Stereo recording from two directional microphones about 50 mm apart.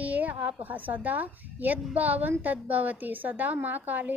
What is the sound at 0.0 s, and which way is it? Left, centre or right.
A woman's voice, right.